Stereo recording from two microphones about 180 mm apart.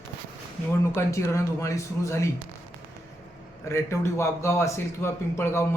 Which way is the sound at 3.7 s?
15° left (ahead or behind).